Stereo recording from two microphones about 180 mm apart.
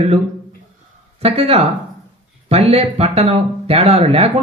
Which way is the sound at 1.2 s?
35° right (ahead or behind).